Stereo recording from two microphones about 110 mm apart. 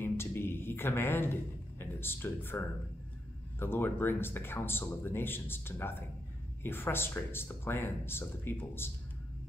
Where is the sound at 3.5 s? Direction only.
20° left (ahead or behind).